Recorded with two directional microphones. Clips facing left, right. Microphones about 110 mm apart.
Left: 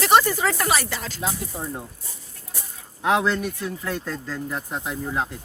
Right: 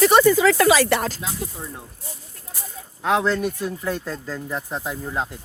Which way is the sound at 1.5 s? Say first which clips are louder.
Left 4 dB; 30° left (ahead or behind).